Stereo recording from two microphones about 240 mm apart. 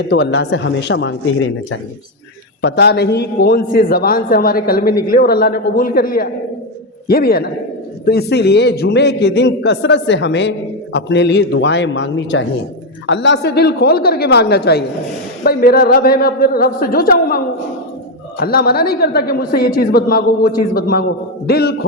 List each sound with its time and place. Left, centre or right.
0.1 s a man's voice: left